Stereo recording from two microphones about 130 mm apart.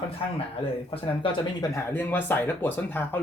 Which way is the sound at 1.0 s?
40° left (ahead or behind).